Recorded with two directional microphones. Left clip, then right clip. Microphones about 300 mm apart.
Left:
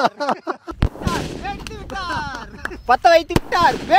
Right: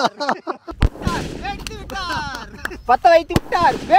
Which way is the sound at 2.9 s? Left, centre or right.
Centre.